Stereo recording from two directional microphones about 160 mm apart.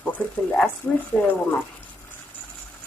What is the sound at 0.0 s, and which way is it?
Speech, 10° left (ahead or behind).